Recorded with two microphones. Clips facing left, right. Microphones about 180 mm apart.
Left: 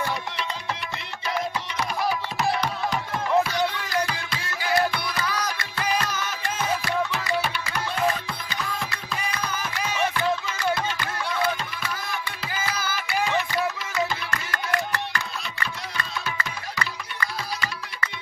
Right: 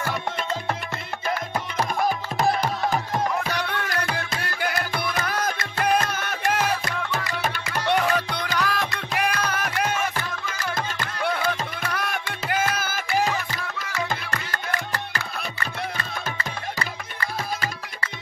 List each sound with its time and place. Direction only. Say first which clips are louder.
0.0 s music: right 1 dB; 50° right (ahead or behind)
3.5 s music: left 3 dB; 60° right (ahead or behind)
6.8 s music: left 2 dB; 45° right (ahead or behind)
7.8 s music: right 4 dB; 80° right
11.2 s music: right 2 dB; 60° right (ahead or behind)